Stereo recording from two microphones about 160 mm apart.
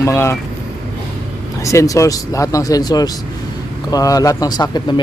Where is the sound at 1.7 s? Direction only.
20° left (ahead or behind).